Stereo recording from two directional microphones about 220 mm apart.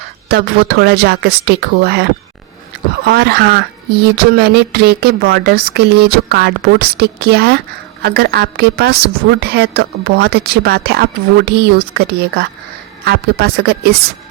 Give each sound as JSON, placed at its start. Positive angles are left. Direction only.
{"t": 0.3, "sound": "a woman's voice", "side_deg": -45}
{"t": 3.1, "sound": "a woman's voice", "side_deg": -45}